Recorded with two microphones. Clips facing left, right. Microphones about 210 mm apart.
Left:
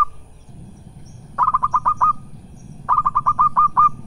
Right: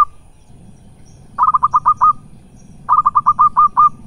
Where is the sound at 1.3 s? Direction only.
20° left (ahead or behind).